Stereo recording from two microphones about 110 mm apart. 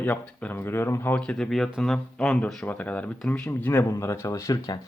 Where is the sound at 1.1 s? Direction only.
10° left (ahead or behind).